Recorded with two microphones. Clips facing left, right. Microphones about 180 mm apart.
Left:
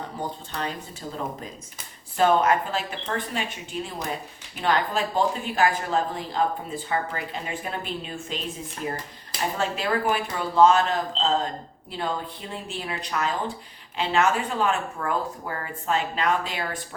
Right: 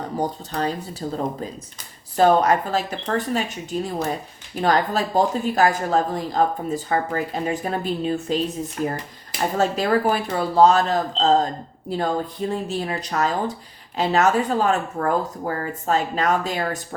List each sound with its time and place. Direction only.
0.2 s speech: 35° right (ahead or behind)
9.6 s speech: 40° right (ahead or behind)